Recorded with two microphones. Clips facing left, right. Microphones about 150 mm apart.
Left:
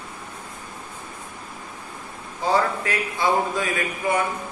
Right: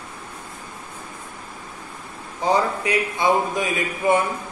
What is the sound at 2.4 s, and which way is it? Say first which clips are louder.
A man's voice: right 1 dB; 20° right (ahead or behind).